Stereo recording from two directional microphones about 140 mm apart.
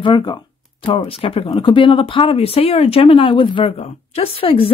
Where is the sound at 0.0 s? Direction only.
35° left (ahead or behind).